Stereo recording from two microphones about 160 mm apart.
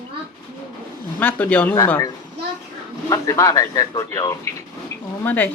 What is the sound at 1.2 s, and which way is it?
Speech, 10° left (ahead or behind).